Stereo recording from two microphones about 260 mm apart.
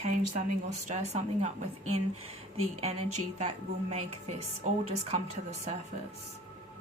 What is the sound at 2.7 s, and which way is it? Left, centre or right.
Speech, right.